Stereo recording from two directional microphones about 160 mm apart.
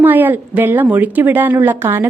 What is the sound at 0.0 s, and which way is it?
A woman's voice, 10° right (ahead or behind).